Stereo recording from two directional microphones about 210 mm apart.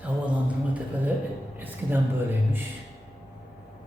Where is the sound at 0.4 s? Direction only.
5° right (ahead or behind).